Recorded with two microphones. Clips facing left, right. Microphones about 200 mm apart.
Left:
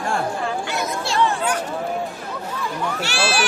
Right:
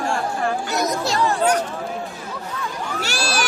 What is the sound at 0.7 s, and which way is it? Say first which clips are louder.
Chatter: even; 40° right (ahead or behind).